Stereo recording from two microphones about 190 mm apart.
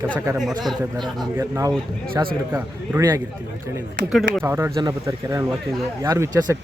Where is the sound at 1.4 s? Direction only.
15° right (ahead or behind).